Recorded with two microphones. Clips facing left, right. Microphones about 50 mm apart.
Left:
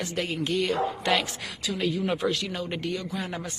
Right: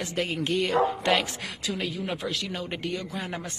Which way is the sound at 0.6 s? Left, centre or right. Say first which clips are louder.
Right 2 dB; centre.